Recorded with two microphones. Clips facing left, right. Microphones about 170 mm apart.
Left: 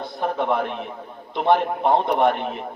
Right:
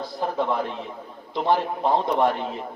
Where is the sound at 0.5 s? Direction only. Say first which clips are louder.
Left 3 dB; 65° left (ahead or behind).